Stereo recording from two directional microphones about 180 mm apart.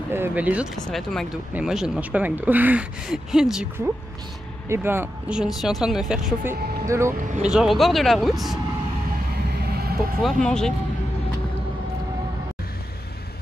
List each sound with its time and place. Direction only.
0.1 s speech: 10° right (ahead or behind)
6.9 s speech: 15° right (ahead or behind)
7.4 s speech: centre (ahead or behind)
9.5 s vehicle: 65° right (ahead or behind)
10.2 s speech: 5° left (ahead or behind)